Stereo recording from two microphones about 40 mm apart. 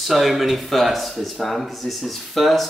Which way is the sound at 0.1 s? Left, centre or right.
Centre.